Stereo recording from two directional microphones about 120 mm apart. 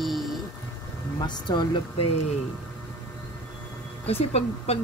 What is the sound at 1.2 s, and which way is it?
Speech, 35° left (ahead or behind).